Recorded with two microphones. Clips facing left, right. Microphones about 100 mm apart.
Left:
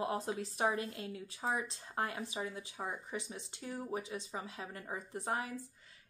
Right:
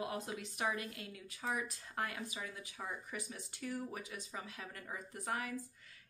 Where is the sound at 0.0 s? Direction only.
35° left (ahead or behind).